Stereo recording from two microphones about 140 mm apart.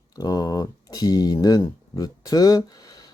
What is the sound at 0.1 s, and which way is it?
Speech, 25° left (ahead or behind).